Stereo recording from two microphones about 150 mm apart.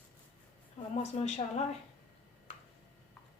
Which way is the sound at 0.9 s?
45° left (ahead or behind).